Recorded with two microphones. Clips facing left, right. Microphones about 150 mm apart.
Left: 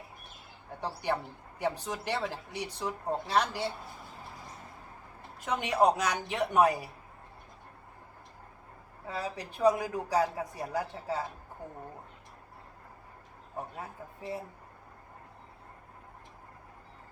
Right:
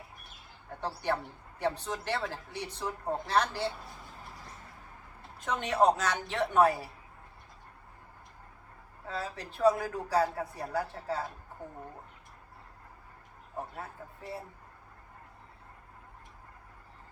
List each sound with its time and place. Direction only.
0.8 s speech: 15° left (ahead or behind)
5.5 s speech: 10° left (ahead or behind)
9.0 s speech: 15° left (ahead or behind)
13.7 s speech: 15° left (ahead or behind)